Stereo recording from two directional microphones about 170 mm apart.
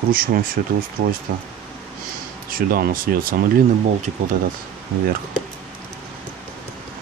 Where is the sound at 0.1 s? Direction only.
55° right (ahead or behind).